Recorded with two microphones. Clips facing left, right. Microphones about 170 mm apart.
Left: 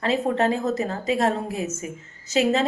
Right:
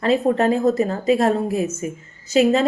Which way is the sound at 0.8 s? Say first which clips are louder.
Right 6 dB; 40° right (ahead or behind).